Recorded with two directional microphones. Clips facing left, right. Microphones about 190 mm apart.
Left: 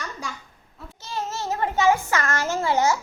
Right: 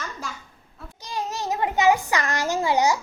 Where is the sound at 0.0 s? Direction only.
Centre (ahead or behind).